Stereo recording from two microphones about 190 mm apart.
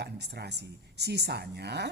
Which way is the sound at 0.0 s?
60° right (ahead or behind).